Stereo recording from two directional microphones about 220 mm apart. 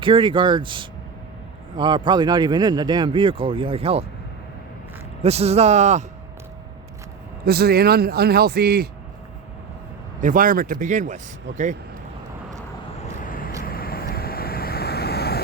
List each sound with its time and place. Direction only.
0.0 s speech: 20° right (ahead or behind)
5.2 s speech: 30° right (ahead or behind)
7.4 s a man's voice: 45° right (ahead or behind)
10.2 s speech: 40° right (ahead or behind)
13.7 s vehicle: 45° left (ahead or behind)